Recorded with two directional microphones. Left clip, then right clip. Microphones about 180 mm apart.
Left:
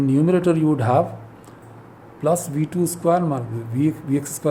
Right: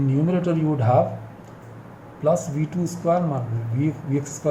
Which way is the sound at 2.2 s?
60° left (ahead or behind).